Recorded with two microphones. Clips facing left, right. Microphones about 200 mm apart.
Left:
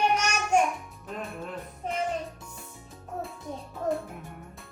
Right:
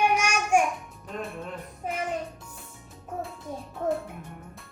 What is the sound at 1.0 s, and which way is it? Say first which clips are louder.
Music: right 1 dB; centre (ahead or behind).